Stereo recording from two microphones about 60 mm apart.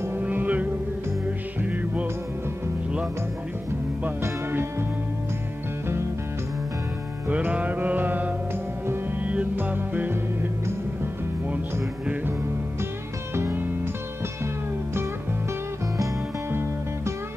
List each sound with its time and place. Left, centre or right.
0.2 s music: right
4.5 s music: right
7.2 s mantra: right
9.2 s music: right
13.3 s music: right
16.4 s music: right